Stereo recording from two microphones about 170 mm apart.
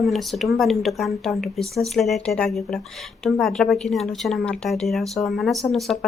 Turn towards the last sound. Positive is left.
turn(degrees=0)  # may be behind; listen again after turning